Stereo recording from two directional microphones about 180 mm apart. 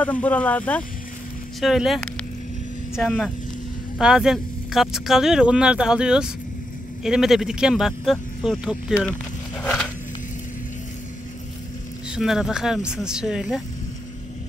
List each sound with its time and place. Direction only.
0.0 s speech: 10° left (ahead or behind)
9.6 s a sound: 5° left (ahead or behind)
12.2 s speech: centre (ahead or behind)